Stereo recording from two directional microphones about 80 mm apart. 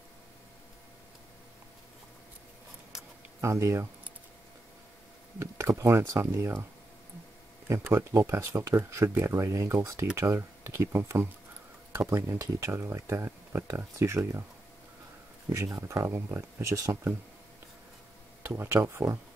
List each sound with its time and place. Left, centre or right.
3.3 s speech: right
5.4 s speech: right
7.6 s speech: right
15.5 s speech: right
18.4 s speech: right